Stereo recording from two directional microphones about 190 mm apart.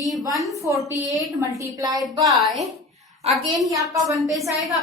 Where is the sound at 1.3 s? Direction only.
15° right (ahead or behind).